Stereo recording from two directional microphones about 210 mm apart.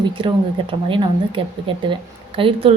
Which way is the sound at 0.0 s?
25° right (ahead or behind).